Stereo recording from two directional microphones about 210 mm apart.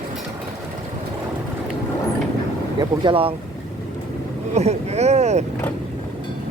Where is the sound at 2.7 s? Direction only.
25° right (ahead or behind).